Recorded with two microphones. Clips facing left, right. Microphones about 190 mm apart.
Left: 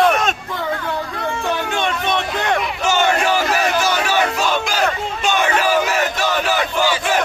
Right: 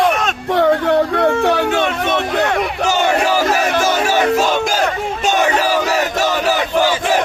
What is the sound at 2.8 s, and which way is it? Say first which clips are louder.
Music: right 2 dB; 35° right (ahead or behind).